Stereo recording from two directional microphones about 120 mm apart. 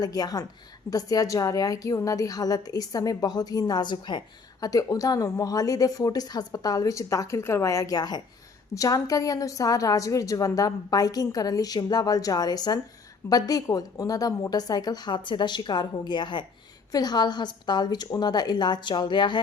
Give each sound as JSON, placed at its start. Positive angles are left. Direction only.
{"t": 0.0, "sound": "a woman's voice", "side_deg": 30}
{"t": 4.6, "sound": "a woman's voice", "side_deg": 30}